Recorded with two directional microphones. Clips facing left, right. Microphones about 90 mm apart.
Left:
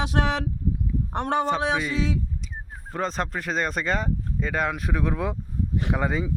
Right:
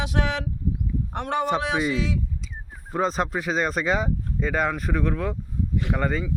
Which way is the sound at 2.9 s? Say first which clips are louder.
Right 4 dB; 5° right (ahead or behind).